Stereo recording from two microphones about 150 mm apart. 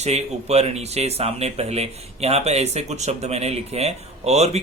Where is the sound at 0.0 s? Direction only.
45° right (ahead or behind).